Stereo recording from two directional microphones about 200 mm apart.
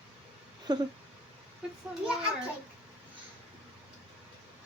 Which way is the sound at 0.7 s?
20° right (ahead or behind).